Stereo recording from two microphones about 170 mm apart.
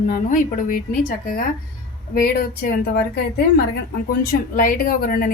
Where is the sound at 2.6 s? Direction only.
65° left (ahead or behind).